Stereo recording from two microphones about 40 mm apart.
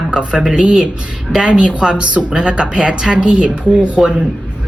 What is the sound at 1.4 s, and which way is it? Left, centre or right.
Speech, right.